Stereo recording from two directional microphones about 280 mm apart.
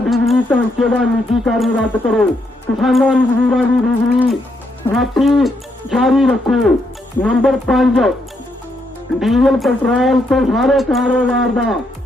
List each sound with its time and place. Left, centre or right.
0.0 s speech: centre
9.2 s speech: centre